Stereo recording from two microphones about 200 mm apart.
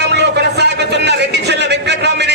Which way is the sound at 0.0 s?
60° right (ahead or behind).